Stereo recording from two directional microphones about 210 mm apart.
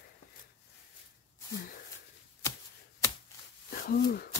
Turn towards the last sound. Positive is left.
turn(degrees=45)  # may be behind; listen again after turning